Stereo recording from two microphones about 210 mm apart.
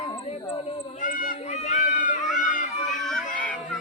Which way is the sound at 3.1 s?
5° left (ahead or behind).